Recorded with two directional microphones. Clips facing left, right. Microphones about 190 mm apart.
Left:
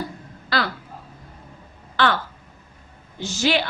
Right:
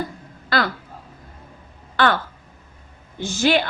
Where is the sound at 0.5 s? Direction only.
50° right (ahead or behind).